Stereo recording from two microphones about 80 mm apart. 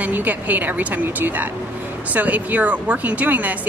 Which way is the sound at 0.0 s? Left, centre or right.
Right.